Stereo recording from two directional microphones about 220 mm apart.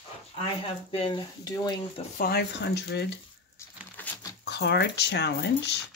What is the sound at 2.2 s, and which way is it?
Speech, 45° left (ahead or behind).